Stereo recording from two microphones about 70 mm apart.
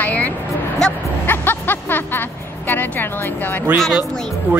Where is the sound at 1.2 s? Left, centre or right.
Left.